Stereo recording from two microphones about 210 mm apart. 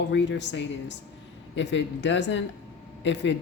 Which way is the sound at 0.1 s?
55° left (ahead or behind).